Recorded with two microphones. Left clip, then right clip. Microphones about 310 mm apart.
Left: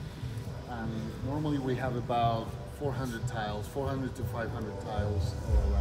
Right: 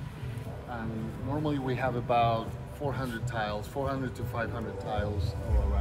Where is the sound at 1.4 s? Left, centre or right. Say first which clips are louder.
Right 2 dB; centre.